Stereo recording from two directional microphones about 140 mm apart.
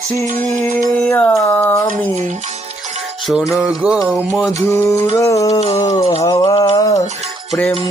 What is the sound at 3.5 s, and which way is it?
Music, 10° right (ahead or behind).